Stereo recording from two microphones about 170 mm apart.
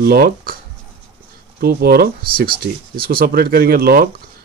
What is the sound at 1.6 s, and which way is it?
Speech, 65° right (ahead or behind).